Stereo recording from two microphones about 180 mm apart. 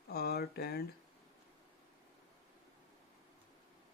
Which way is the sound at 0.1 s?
60° left (ahead or behind).